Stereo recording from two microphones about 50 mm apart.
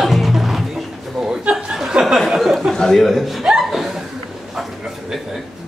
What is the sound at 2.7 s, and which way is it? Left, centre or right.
Speech, centre.